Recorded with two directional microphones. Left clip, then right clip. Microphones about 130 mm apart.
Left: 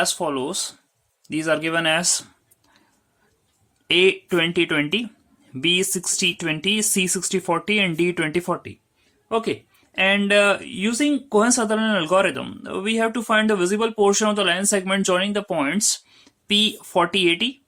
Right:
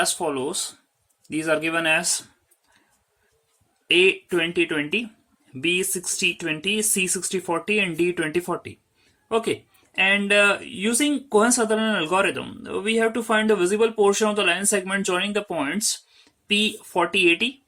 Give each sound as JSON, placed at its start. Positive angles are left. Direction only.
{"t": 0.0, "sound": "speech", "side_deg": 35}
{"t": 3.8, "sound": "speech", "side_deg": 55}
{"t": 9.3, "sound": "speech", "side_deg": 20}
{"t": 9.9, "sound": "speech", "side_deg": 35}
{"t": 10.8, "sound": "speech", "side_deg": 20}
{"t": 16.5, "sound": "speech", "side_deg": 55}